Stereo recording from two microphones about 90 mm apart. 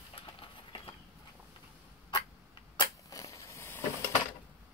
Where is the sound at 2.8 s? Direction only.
40° left (ahead or behind).